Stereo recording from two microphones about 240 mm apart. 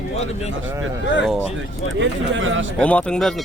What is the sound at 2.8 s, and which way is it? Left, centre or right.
Speech, centre.